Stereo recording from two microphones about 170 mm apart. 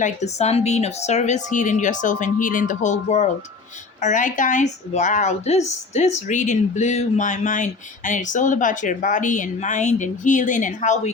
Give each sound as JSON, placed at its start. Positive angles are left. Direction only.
{"t": 0.0, "sound": "a woman's voice", "side_deg": 40}